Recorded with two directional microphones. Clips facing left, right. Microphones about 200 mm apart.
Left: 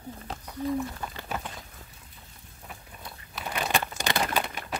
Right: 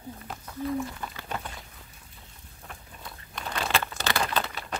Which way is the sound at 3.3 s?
5° left (ahead or behind).